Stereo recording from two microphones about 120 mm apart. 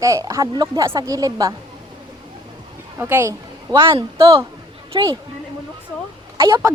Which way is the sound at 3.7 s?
45° right (ahead or behind).